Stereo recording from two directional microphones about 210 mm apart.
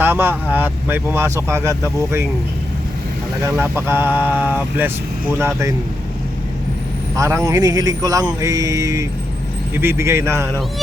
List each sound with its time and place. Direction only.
0.0 s speech: 10° right (ahead or behind)
3.4 s speech: 10° right (ahead or behind)
7.2 s speech: 15° right (ahead or behind)